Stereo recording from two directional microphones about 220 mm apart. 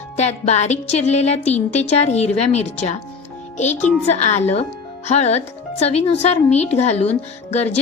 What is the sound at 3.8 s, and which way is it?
Speech, 30° left (ahead or behind).